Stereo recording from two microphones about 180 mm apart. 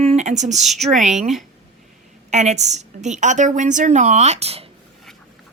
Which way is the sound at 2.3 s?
40° right (ahead or behind).